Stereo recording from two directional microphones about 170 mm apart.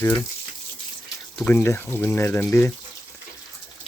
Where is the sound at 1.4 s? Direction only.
15° left (ahead or behind).